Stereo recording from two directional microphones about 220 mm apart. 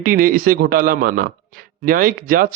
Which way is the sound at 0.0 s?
40° right (ahead or behind).